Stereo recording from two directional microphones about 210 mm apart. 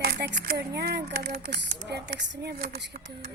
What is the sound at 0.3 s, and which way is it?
Speech, 45° right (ahead or behind).